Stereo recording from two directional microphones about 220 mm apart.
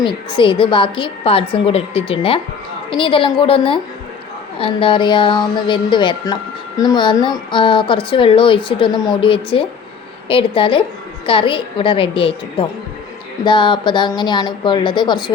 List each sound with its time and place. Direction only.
0.0 s speech: 20° left (ahead or behind)